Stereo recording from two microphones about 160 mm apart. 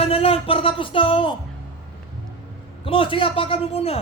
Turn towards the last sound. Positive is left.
turn(degrees=40)  # may be behind; listen again after turning